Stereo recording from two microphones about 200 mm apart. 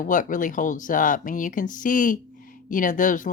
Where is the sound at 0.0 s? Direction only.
40° left (ahead or behind).